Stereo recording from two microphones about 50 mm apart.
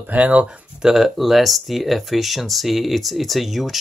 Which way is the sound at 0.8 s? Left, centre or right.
Centre.